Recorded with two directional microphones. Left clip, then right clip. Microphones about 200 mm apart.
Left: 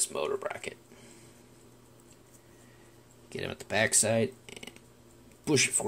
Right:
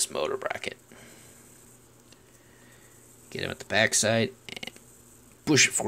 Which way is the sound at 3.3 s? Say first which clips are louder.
Right 3 dB; 15° right (ahead or behind).